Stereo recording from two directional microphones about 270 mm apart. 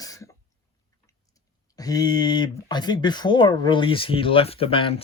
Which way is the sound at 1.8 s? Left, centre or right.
Centre.